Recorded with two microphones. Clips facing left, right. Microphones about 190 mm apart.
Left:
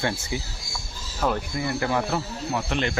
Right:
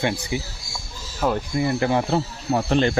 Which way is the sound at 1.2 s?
15° right (ahead or behind).